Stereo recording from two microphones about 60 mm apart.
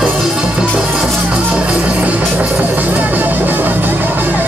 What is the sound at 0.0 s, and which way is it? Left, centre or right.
Music, centre.